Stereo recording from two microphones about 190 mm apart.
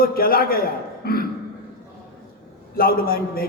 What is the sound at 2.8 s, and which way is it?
Speech, 50° left (ahead or behind).